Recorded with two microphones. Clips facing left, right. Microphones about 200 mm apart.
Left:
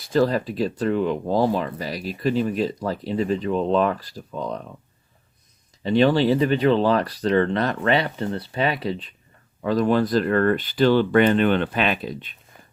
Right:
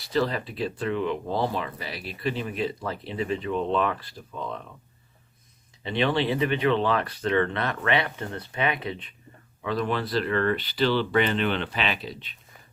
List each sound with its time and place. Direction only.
0.0 s speech: 45° left (ahead or behind)
5.8 s speech: 40° left (ahead or behind)